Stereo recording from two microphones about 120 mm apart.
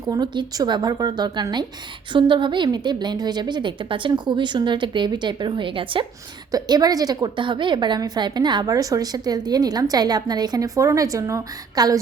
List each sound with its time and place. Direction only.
0.1 s a woman's voice: 35° right (ahead or behind)
6.5 s a woman's voice: 35° right (ahead or behind)